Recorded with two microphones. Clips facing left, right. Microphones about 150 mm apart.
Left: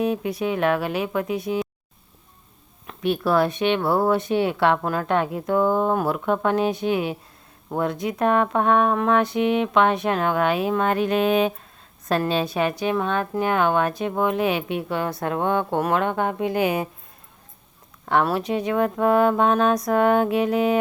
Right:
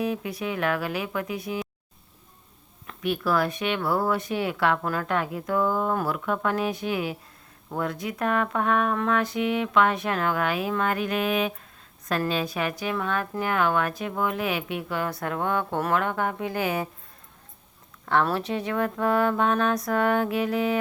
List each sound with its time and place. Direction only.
0.0 s a woman's voice: 25° left (ahead or behind)
2.8 s a woman's voice: 25° left (ahead or behind)
18.0 s a woman's voice: 15° left (ahead or behind)